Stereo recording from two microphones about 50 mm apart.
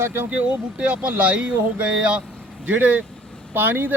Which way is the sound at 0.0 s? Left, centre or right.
Right.